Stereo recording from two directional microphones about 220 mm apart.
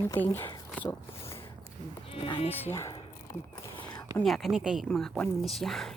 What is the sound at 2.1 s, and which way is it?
Speech, 25° left (ahead or behind).